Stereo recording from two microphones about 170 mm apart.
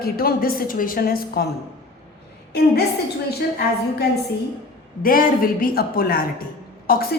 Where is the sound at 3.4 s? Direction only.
65° left (ahead or behind).